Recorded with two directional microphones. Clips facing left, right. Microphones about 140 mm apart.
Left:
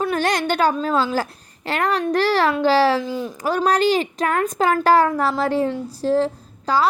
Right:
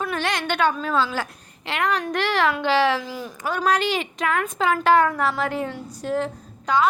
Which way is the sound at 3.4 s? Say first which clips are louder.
Left 4 dB; 35° left (ahead or behind).